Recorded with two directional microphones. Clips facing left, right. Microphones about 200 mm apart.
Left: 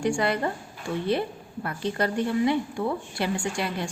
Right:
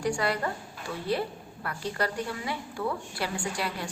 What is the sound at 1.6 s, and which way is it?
Speech, 25° left (ahead or behind).